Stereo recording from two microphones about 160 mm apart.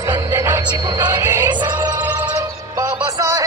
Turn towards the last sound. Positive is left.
turn(degrees=-20)  # may be behind; listen again after turning